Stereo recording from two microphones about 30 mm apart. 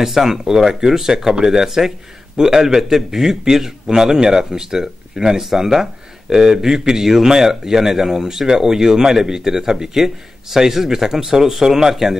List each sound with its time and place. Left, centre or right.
0.0 s a man's voice: centre